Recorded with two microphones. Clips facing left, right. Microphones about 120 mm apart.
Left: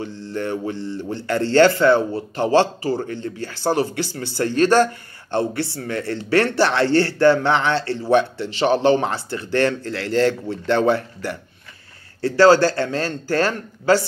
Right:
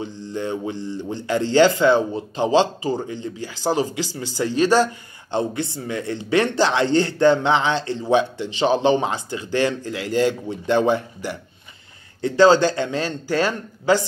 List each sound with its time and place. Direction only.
0.0 s a man's voice: 15° right (ahead or behind)